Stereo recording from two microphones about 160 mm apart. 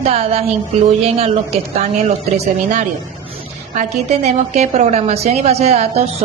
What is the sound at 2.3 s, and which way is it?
A woman's voice, 45° right (ahead or behind).